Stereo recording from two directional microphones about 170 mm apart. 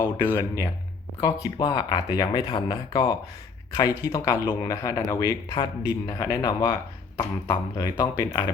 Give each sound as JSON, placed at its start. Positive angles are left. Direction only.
{"t": 0.3, "sound": "speech", "side_deg": 15}